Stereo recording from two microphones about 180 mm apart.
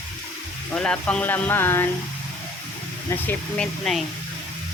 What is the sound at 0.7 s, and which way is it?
Speech, 5° left (ahead or behind).